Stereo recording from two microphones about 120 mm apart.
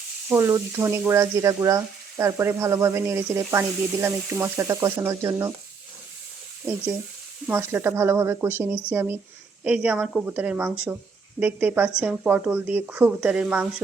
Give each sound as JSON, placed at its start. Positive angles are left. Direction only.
{"t": 0.3, "sound": "speech", "side_deg": -25}
{"t": 7.4, "sound": "speech", "side_deg": -15}